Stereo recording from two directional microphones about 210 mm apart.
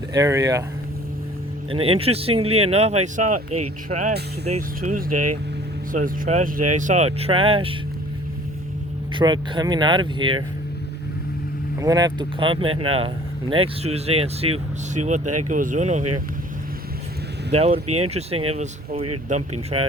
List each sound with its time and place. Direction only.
0.1 s speech: 15° right (ahead or behind)
1.7 s speech: 25° right (ahead or behind)
9.1 s speech: 20° right (ahead or behind)
11.8 s speech: 15° right (ahead or behind); by 16.0 s 35° right (ahead or behind)
17.5 s speech: 30° right (ahead or behind)
17.8 s speech: 90° right
18.1 s speech: 30° right (ahead or behind)